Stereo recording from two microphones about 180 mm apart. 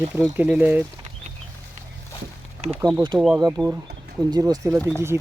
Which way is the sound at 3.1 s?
5° right (ahead or behind).